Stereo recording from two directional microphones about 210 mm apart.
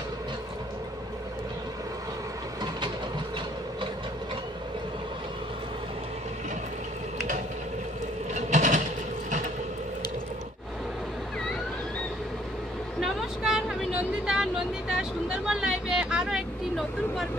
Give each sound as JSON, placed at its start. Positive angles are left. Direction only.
{"t": 7.2, "sound": "a sound", "side_deg": -35}
{"t": 8.4, "sound": "mechanisms", "side_deg": -35}
{"t": 13.0, "sound": "vehicle", "side_deg": 0}